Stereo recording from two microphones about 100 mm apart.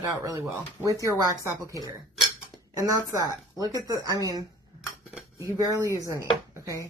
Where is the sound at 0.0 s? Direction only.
30° right (ahead or behind).